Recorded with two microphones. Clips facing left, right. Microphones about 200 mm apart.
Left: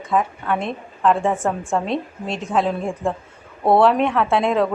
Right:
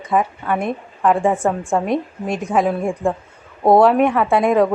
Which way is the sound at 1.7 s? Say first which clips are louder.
Right 3 dB; 15° right (ahead or behind).